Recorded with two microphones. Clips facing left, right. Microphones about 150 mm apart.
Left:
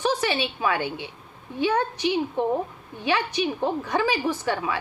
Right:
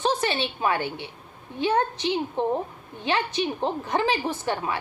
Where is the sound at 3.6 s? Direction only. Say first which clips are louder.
Left 1 dB; 20° right (ahead or behind).